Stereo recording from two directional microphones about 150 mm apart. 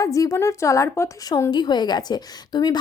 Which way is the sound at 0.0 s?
20° left (ahead or behind).